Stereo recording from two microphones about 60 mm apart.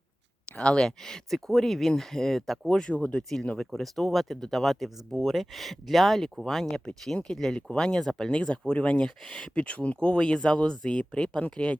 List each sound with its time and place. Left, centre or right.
0.5 s speech: centre
3.7 s speech: centre